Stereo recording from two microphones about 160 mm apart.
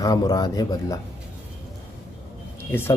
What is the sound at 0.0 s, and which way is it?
Speech, 25° left (ahead or behind).